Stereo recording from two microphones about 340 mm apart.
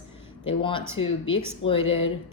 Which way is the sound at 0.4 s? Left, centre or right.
Centre.